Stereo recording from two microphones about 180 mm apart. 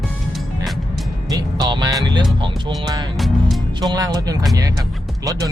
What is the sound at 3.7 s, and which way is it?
Speech, 20° right (ahead or behind).